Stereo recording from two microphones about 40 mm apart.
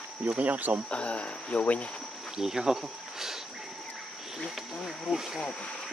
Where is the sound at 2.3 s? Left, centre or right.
Centre.